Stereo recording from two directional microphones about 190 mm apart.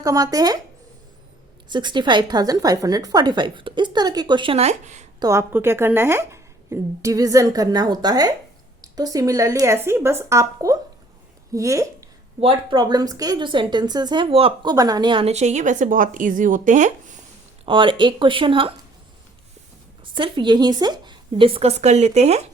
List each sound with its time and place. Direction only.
0.0 s a woman's voice: 20° right (ahead or behind)
1.7 s a woman's voice: 25° right (ahead or behind)
5.2 s a woman's voice: 15° right (ahead or behind); by 17.2 s 40° right (ahead or behind)
17.7 s a woman's voice: 25° right (ahead or behind)
20.1 s a woman's voice: 25° right (ahead or behind)